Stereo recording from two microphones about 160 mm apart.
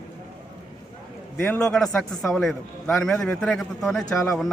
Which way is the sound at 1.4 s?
5° left (ahead or behind).